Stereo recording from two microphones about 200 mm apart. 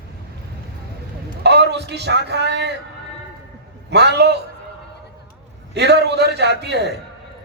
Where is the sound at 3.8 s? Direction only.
60° right (ahead or behind).